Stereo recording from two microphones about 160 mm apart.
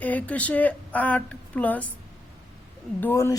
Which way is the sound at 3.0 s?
15° left (ahead or behind).